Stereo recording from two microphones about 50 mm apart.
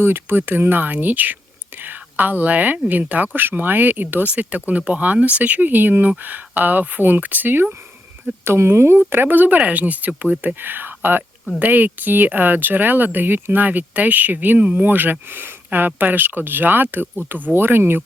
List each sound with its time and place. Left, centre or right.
0.0 s speech: right
8.4 s speech: right
9.0 s speech: right
17.5 s speech: right